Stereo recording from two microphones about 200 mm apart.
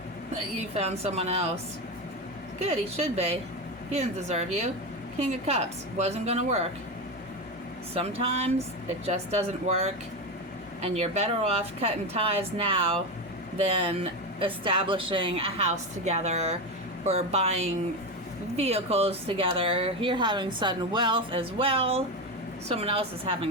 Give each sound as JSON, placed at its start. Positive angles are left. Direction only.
{"t": 0.5, "sound": "a woman's voice", "side_deg": -30}
{"t": 2.6, "sound": "a woman's voice", "side_deg": -30}
{"t": 7.9, "sound": "a woman's voice", "side_deg": -30}